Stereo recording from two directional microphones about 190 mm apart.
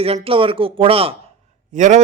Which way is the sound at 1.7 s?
40° right (ahead or behind).